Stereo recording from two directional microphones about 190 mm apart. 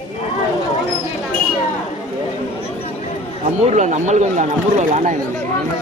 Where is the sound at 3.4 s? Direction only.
40° right (ahead or behind).